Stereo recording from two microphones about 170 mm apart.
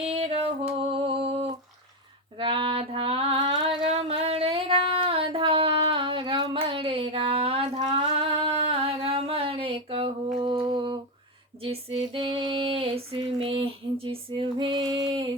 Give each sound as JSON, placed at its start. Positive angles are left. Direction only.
{"t": 0.0, "sound": "a sound", "side_deg": -35}
{"t": 2.4, "sound": "female singing", "side_deg": -30}
{"t": 3.8, "sound": "a sound", "side_deg": -35}
{"t": 10.4, "sound": "mantra", "side_deg": -30}
{"t": 11.6, "sound": "female singing", "side_deg": -35}
{"t": 15.0, "sound": "music", "side_deg": -30}